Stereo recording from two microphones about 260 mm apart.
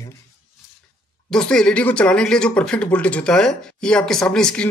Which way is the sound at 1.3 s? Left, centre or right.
Centre.